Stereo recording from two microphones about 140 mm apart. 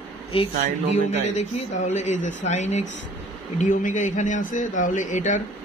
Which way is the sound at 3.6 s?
65° left (ahead or behind).